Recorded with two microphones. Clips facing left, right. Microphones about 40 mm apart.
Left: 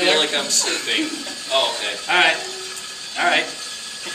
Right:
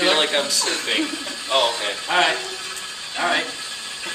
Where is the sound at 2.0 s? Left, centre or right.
Left.